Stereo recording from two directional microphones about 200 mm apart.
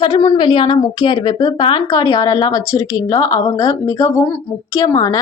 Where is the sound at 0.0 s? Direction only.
25° left (ahead or behind).